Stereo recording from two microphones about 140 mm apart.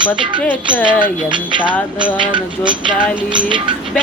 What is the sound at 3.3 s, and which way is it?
Music, 35° right (ahead or behind).